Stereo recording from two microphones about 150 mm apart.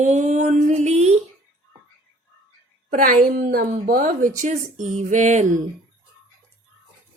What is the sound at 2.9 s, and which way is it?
A woman's voice, 65° right (ahead or behind).